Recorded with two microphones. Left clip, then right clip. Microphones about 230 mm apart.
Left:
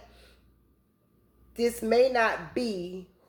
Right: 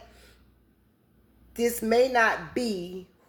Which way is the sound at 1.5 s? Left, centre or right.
Right.